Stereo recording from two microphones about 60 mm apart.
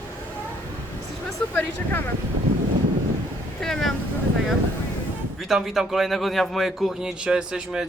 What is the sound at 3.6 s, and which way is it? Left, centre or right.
Vehicle, centre.